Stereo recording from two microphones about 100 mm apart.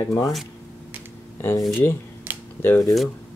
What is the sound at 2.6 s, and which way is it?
Speech, 25° left (ahead or behind).